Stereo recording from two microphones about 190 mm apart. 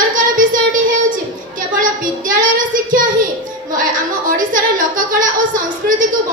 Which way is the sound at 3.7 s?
45° right (ahead or behind).